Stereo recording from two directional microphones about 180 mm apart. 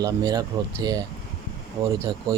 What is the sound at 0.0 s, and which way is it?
Speech, 20° right (ahead or behind).